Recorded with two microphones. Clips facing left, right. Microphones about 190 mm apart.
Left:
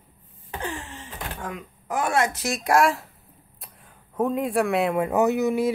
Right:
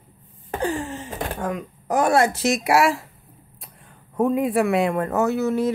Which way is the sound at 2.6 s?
5° right (ahead or behind).